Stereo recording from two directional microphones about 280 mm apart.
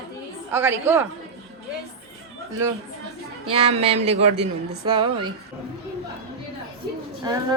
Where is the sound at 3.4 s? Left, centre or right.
Centre.